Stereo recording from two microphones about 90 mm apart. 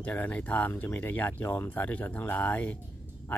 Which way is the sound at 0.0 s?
20° left (ahead or behind).